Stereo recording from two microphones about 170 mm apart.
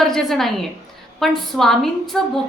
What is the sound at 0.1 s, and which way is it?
A woman's voice, centre (ahead or behind).